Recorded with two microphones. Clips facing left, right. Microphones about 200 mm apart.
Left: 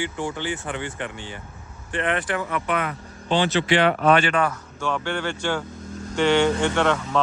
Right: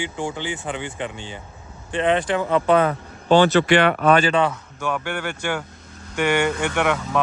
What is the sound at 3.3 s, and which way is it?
Speech, 45° right (ahead or behind).